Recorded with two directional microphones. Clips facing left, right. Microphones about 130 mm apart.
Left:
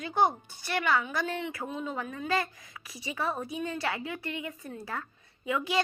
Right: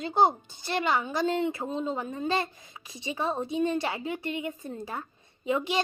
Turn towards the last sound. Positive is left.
turn(degrees=-25)  # may be behind; listen again after turning